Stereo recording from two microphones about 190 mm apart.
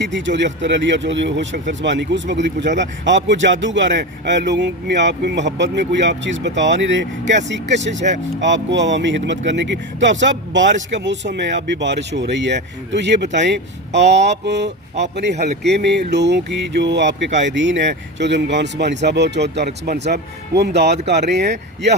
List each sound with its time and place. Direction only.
0.0 s speech: 70° right (ahead or behind)